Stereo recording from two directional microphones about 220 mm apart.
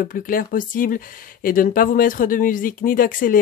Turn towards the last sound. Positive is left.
turn(degrees=40)  # may be behind; listen again after turning